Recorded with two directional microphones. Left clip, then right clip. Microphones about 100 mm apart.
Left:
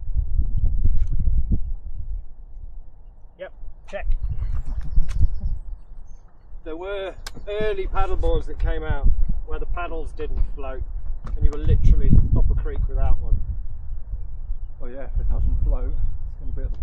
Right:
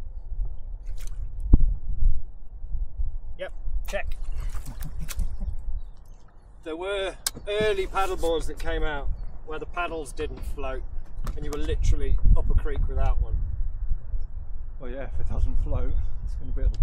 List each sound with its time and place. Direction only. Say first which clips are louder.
3.3 s a sound: right 1 dB; 40° right (ahead or behind)
6.6 s speech: even; 40° right (ahead or behind)
14.8 s speech: even; 40° right (ahead or behind)